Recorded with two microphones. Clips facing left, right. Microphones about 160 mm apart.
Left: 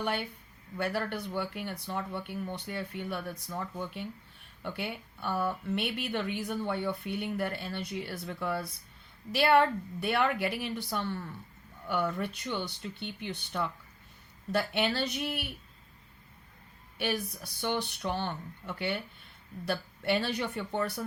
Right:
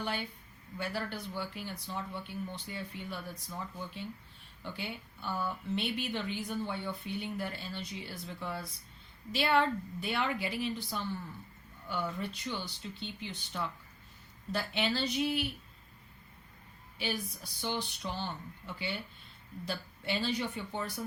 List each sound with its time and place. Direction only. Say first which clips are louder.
0.0 s speech: left 4 dB; 60° left (ahead or behind)
17.0 s speech: left 4 dB; 65° left (ahead or behind)